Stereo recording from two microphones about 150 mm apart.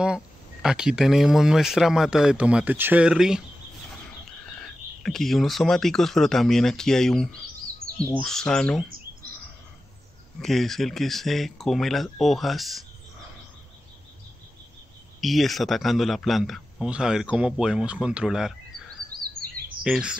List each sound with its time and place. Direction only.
0.0 s speech: 5° right (ahead or behind)
4.6 s speech: 5° left (ahead or behind)
10.4 s speech: centre (ahead or behind)
15.1 s speech: centre (ahead or behind)
19.1 s bird vocalization: 25° right (ahead or behind)
19.8 s speech: 5° right (ahead or behind)